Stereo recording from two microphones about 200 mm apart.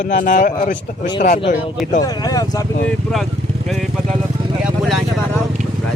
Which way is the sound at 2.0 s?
20° left (ahead or behind).